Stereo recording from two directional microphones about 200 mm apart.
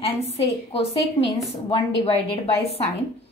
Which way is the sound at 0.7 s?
30° left (ahead or behind).